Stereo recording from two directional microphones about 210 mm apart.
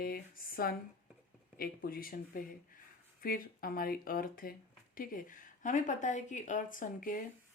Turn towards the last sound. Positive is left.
turn(degrees=40)  # may be behind; listen again after turning